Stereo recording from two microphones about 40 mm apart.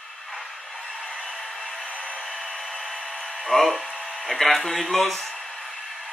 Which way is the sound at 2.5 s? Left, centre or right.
Centre.